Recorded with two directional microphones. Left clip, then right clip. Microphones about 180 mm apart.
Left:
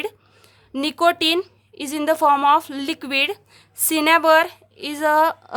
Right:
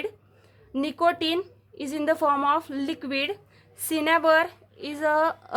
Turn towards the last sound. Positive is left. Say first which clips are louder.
# left 6 dB
turn(degrees=20)  # may be behind; listen again after turning